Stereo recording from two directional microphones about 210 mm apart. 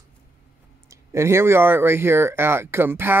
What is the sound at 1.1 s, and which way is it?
Speech, 10° right (ahead or behind).